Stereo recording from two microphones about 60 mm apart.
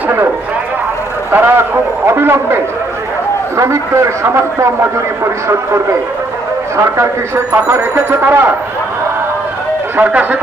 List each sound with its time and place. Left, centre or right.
1.3 s speech: right
3.5 s a man's voice: right
7.0 s speech: right
9.9 s speech: right